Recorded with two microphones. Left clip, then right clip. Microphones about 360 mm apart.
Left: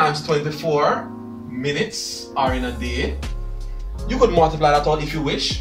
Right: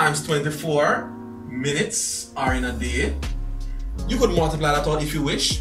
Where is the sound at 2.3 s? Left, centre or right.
Centre.